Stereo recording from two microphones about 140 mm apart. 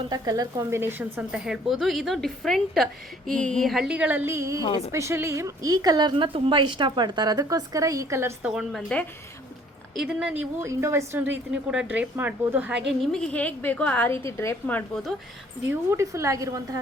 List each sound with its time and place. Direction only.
0.1 s a woman's voice: 25° right (ahead or behind)
4.6 s a woman's voice: 40° left (ahead or behind)
4.9 s a woman's voice: 20° right (ahead or behind)
8.4 s a woman's voice: 5° right (ahead or behind)
9.9 s a woman's voice: 5° right (ahead or behind)
10.6 s a woman's voice: 20° right (ahead or behind)
13.0 s a woman's voice: 5° left (ahead or behind)
15.9 s a woman's voice: 20° right (ahead or behind)